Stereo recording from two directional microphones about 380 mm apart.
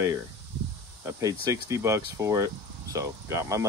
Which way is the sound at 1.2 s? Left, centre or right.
Centre.